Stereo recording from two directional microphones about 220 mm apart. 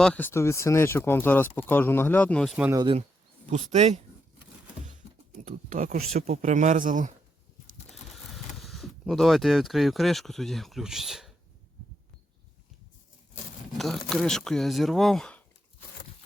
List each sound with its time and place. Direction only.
0.0 s speech: 5° left (ahead or behind)
2.7 s speech: 20° right (ahead or behind)
5.5 s speech: 35° right (ahead or behind)
8.3 s speech: centre (ahead or behind)
13.7 s speech: centre (ahead or behind)